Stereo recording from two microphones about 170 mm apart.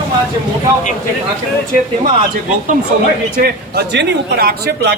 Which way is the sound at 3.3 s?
65° right (ahead or behind).